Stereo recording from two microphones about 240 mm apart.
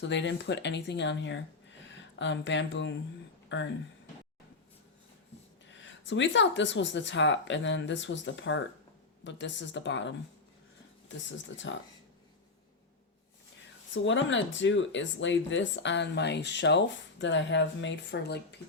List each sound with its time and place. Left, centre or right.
0.0 s speech: left
5.6 s speech: left
13.9 s speech: left